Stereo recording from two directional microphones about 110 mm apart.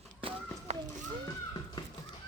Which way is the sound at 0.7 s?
80° right.